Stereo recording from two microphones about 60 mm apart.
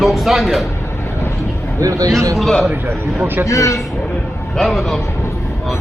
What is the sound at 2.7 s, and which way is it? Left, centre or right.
Speech, right.